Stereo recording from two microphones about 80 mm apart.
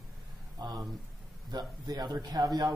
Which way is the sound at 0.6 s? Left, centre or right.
Right.